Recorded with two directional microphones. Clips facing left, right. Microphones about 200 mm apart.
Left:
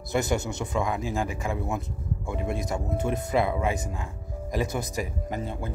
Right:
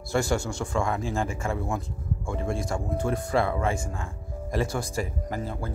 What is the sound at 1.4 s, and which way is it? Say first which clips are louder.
Speech: even; 15° left (ahead or behind).